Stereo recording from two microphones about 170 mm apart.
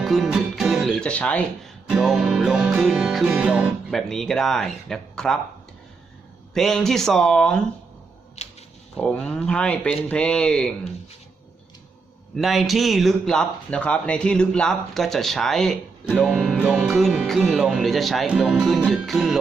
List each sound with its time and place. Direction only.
0.0 s speech: centre (ahead or behind)
6.5 s speech: centre (ahead or behind)
8.4 s a sound: 40° left (ahead or behind)
9.0 s speech: 5° left (ahead or behind)
12.4 s speech: centre (ahead or behind)